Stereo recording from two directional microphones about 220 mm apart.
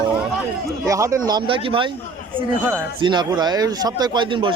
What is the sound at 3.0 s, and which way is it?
Speech, 20° right (ahead or behind).